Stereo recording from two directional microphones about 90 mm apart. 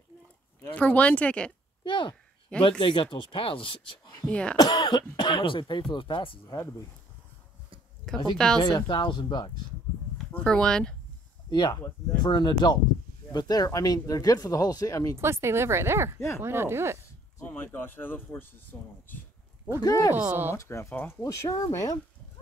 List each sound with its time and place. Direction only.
0.7 s speech: 15° left (ahead or behind)
1.9 s speech: 60° left (ahead or behind)
4.3 s speech: 10° left (ahead or behind)
4.6 s speech: 45° left (ahead or behind); by 6.4 s 65° left (ahead or behind)
8.1 s speech: 5° left (ahead or behind)
8.6 s speech: 55° left (ahead or behind)
10.4 s speech: 10° left (ahead or behind)
11.5 s speech: 50° left (ahead or behind); by 15.1 s 35° left (ahead or behind)
15.1 s a woman's voice: 30° right (ahead or behind)
17.4 s speech: 25° left (ahead or behind)
19.8 s speech: 40° left (ahead or behind)
20.2 s a woman's voice: 20° right (ahead or behind)
20.5 s speech: 35° left (ahead or behind)